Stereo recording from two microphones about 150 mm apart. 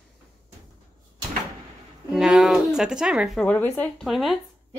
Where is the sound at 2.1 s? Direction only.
Centre (ahead or behind).